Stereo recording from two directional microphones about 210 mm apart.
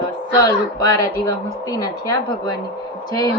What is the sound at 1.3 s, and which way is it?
A woman's voice, 15° left (ahead or behind).